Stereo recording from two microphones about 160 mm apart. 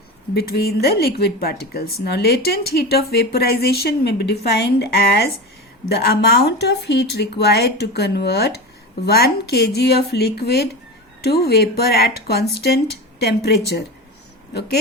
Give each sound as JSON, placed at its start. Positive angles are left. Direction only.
{"t": 0.3, "sound": "speech", "side_deg": 75}